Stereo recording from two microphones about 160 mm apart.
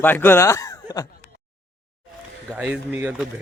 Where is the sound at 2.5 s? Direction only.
10° right (ahead or behind).